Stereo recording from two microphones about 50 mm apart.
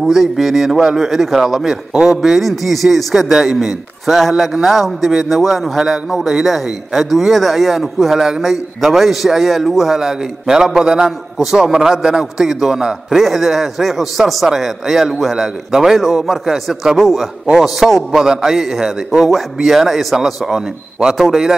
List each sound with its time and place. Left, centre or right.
0.0 s a man's voice: centre